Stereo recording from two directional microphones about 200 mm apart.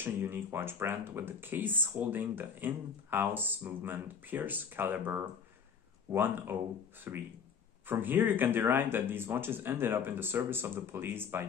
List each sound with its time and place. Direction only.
0.0 s speech: 10° right (ahead or behind)